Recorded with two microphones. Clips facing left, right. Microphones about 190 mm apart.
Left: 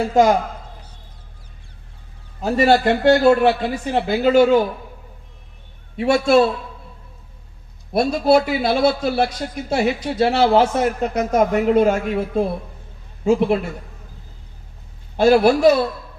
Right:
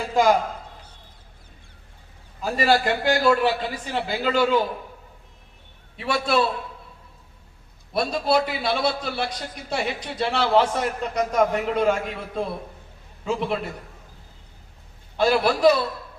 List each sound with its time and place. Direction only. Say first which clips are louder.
0.0 s a man's voice: left 7 dB; 45° left (ahead or behind)
2.6 s a man's voice: left 6 dB; 25° left (ahead or behind)
3.9 s a man's voice: left 9 dB; 45° left (ahead or behind)
6.0 s a man's voice: left 8 dB; 50° left (ahead or behind)
8.1 s a man's voice: left 7 dB; 50° left (ahead or behind)
15.1 s a man's voice: left 7 dB; 45° left (ahead or behind)